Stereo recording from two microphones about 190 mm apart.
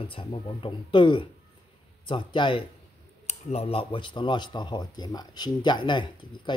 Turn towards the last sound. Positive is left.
turn(degrees=25)  # may be behind; listen again after turning